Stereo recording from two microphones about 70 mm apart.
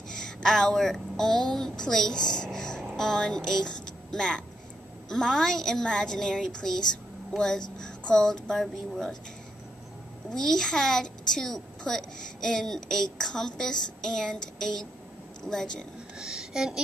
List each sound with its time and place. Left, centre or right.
0.1 s a woman's voice: centre
10.3 s a child's voice: centre
16.2 s speech: centre